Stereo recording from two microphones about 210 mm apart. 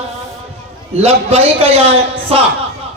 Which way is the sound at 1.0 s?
30° right (ahead or behind).